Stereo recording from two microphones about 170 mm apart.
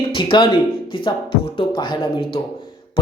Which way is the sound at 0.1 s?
30° left (ahead or behind).